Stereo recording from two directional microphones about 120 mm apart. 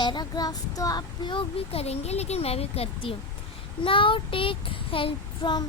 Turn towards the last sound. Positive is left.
turn(degrees=40)  # may be behind; listen again after turning